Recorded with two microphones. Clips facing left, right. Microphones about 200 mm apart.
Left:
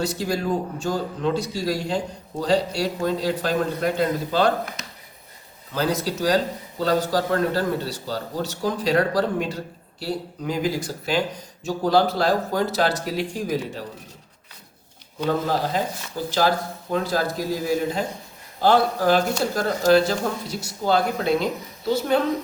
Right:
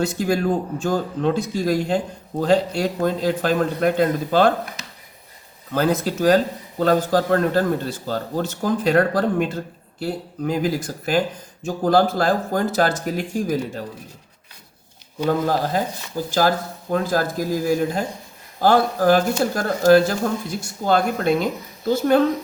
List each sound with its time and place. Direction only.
0.0 s speech: 55° right (ahead or behind)
5.7 s speech: 50° right (ahead or behind)
15.3 s speech: 45° right (ahead or behind)
16.9 s speech: 50° right (ahead or behind)